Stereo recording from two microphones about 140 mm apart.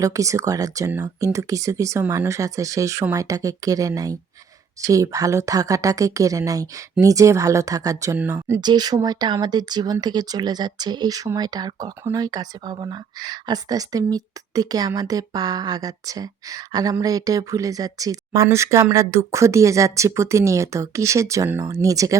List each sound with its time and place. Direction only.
0.0 s speech: 25° right (ahead or behind)
8.6 s speech: 30° right (ahead or behind)